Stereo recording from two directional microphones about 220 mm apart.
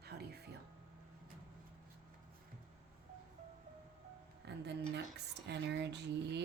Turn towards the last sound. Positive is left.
turn(degrees=-50)  # may be behind; listen again after turning